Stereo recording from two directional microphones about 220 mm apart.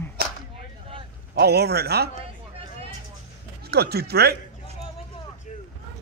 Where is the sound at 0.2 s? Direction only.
45° right (ahead or behind).